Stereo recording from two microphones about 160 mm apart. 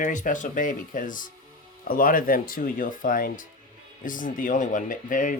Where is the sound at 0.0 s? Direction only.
55° left (ahead or behind).